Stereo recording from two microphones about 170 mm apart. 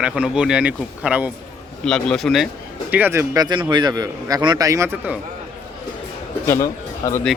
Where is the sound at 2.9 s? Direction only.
15° right (ahead or behind).